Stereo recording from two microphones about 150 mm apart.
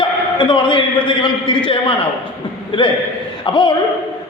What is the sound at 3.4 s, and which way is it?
Speech, 30° left (ahead or behind).